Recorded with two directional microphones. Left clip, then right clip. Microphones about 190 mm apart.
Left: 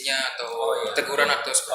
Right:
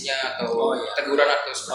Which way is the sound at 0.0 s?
35° left (ahead or behind).